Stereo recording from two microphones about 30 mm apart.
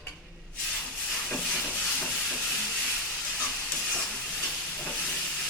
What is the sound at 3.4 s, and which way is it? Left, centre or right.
Steam, left.